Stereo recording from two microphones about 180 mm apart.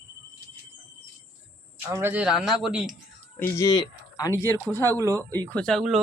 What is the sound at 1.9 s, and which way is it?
Speech, 15° right (ahead or behind).